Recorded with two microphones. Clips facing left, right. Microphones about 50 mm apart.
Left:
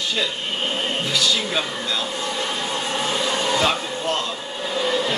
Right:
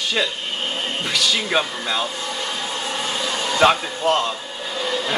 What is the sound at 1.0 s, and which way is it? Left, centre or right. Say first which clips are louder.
Speech: right 2 dB; right.